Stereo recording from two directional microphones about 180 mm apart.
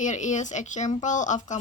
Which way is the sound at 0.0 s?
45° left (ahead or behind).